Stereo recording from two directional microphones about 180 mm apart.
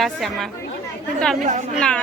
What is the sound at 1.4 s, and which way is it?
Speech, 40° right (ahead or behind).